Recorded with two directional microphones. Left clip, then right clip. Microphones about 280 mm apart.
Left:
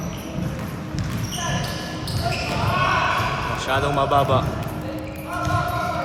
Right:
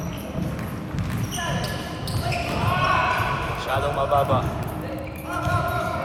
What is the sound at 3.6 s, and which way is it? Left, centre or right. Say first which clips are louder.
Music: left 4 dB; left.